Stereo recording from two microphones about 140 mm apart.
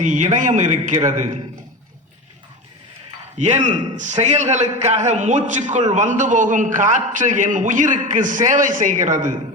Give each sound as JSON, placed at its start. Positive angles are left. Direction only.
{"t": 0.0, "sound": "a man's voice", "side_deg": -60}
{"t": 3.3, "sound": "a man's voice", "side_deg": -55}